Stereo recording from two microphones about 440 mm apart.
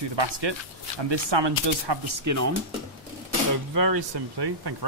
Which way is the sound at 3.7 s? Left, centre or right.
Right.